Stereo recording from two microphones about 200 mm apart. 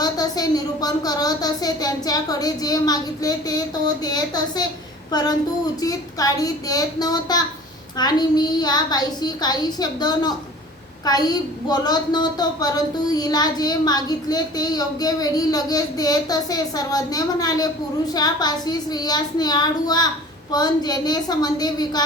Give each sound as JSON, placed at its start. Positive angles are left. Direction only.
{"t": 0.0, "sound": "a woman's voice", "side_deg": 20}